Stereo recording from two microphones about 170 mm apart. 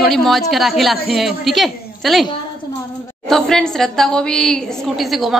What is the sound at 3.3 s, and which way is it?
A woman's voice, centre (ahead or behind).